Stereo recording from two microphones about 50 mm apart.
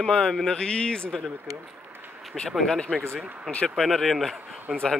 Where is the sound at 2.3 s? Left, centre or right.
Centre.